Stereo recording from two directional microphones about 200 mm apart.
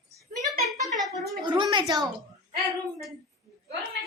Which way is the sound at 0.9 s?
Centre (ahead or behind).